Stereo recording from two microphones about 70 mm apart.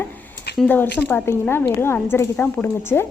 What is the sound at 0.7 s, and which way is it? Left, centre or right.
Speech, left.